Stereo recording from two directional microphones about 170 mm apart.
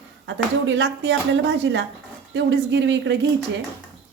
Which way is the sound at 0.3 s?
90° right.